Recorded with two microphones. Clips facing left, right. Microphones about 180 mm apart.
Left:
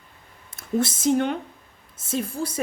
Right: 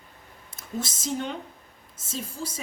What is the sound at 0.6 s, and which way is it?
A woman's voice, 60° left (ahead or behind).